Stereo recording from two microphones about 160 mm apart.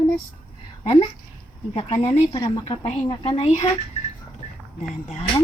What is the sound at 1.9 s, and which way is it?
Speech, 20° left (ahead or behind).